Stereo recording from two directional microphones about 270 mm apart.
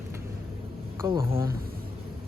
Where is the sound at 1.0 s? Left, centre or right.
Centre.